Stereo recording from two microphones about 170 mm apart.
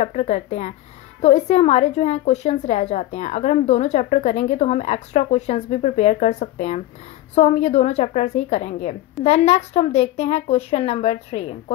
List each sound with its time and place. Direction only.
0.0 s a woman's voice: 45° left (ahead or behind)